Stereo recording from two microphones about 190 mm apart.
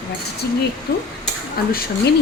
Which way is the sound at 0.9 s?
60° left (ahead or behind).